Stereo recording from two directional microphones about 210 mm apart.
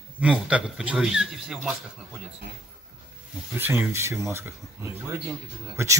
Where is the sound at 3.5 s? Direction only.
10° right (ahead or behind).